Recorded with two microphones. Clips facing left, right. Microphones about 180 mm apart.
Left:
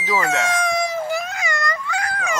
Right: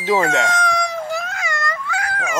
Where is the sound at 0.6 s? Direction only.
5° left (ahead or behind).